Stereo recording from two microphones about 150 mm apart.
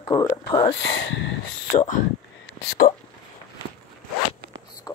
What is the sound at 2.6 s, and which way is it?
Speech, 90° left.